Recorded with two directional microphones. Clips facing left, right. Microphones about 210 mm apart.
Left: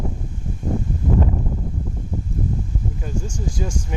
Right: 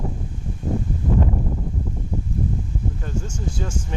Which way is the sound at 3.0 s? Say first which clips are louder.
Left 1 dB; 10° left (ahead or behind).